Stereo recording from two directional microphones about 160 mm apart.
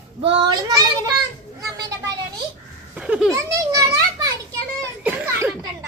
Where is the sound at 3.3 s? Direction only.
20° right (ahead or behind).